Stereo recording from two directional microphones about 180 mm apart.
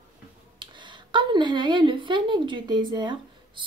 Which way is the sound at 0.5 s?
25° right (ahead or behind).